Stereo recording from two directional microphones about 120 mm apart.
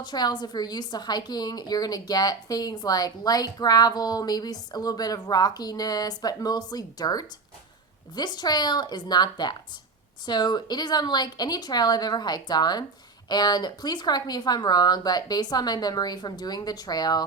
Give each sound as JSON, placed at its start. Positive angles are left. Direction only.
{"t": 0.0, "sound": "a woman's voice", "side_deg": 35}